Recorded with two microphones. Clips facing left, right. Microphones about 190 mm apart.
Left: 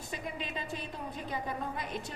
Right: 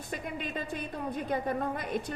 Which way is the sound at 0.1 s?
50° right (ahead or behind).